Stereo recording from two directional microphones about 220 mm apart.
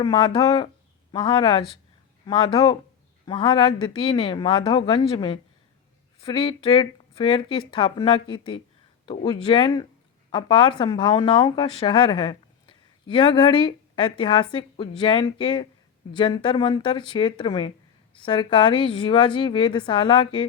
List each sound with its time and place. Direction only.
0.0 s a woman's voice: 20° left (ahead or behind)